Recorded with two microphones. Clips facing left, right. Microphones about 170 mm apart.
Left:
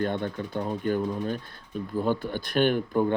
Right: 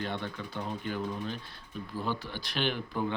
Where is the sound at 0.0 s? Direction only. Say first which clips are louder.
Left 8 dB; 50° left (ahead or behind).